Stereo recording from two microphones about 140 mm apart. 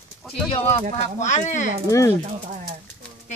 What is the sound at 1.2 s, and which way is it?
Speech, 60° left (ahead or behind).